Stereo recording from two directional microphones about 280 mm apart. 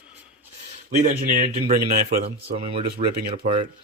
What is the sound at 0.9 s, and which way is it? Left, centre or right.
A man's voice, right.